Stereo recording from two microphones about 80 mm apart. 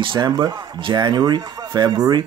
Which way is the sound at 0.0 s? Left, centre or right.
Right.